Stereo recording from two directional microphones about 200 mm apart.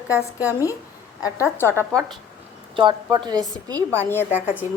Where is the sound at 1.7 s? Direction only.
15° right (ahead or behind).